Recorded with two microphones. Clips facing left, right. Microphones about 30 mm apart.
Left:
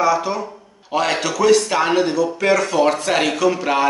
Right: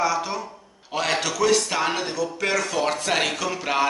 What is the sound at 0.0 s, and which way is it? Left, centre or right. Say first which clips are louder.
A man's voice: left 6 dB; centre.